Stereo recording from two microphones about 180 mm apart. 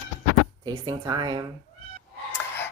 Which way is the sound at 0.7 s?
20° right (ahead or behind).